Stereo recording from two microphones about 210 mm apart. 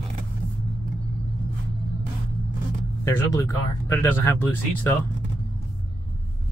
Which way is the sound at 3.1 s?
10° left (ahead or behind).